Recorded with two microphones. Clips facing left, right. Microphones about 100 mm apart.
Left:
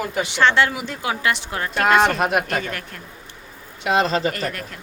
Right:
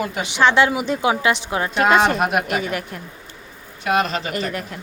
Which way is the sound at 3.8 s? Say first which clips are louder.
Left 1 dB; 30° left (ahead or behind).